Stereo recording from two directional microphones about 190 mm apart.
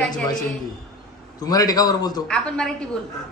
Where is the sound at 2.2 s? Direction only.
5° left (ahead or behind).